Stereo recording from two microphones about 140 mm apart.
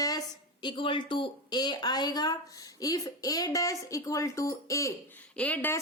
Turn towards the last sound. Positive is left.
turn(degrees=10)  # may be behind; listen again after turning